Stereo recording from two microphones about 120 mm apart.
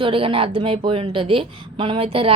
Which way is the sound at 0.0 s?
45° right (ahead or behind).